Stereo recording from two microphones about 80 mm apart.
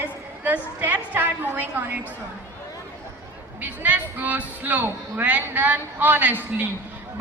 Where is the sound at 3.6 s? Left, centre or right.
Right.